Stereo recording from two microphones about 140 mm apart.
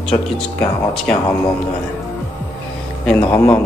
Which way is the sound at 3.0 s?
10° left (ahead or behind).